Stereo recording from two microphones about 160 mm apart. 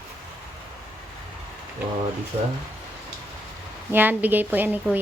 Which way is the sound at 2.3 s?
40° right (ahead or behind).